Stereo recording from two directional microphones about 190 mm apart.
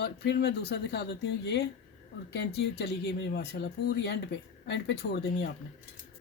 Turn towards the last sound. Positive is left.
turn(degrees=60)  # may be behind; listen again after turning